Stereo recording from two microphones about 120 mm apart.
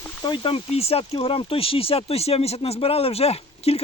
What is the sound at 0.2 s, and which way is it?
Speech, 40° left (ahead or behind).